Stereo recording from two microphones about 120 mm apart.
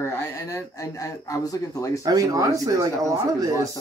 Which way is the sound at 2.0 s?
30° right (ahead or behind).